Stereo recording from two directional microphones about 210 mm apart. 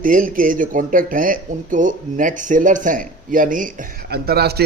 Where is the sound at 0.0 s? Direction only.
40° right (ahead or behind).